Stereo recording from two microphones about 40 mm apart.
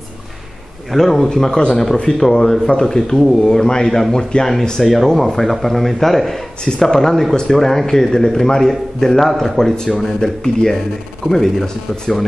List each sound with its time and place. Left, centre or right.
0.9 s a man's voice: centre
5.0 s a man's voice: centre